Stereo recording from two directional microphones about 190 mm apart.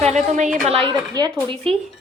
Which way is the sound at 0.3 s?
40° right (ahead or behind).